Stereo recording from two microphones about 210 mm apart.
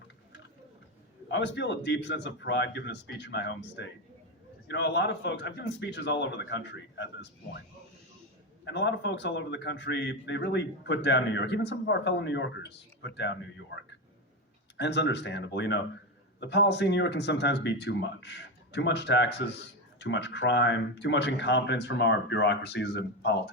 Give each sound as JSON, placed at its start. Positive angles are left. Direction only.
{"t": 1.3, "sound": "speech", "side_deg": 60}
{"t": 8.6, "sound": "speech", "side_deg": 55}
{"t": 14.8, "sound": "speech", "side_deg": 55}